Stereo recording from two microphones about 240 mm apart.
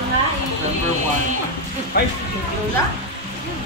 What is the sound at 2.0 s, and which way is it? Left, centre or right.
Speech, left.